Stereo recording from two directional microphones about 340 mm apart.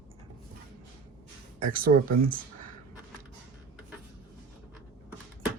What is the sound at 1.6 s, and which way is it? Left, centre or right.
Speech, right.